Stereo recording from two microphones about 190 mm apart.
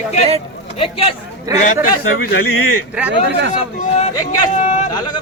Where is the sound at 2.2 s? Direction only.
70° left (ahead or behind).